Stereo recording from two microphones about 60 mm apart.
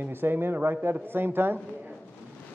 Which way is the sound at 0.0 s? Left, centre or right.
Right.